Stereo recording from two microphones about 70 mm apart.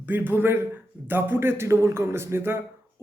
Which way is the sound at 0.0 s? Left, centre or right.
Right.